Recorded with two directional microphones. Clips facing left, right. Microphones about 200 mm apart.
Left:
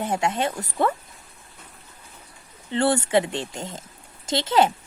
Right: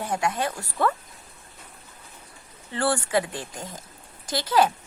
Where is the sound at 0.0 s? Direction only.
25° left (ahead or behind).